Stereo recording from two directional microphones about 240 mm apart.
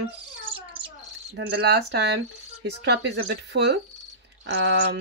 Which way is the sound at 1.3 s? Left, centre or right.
Right.